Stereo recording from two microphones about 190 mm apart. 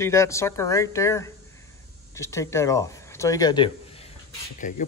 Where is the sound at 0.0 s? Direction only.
15° left (ahead or behind).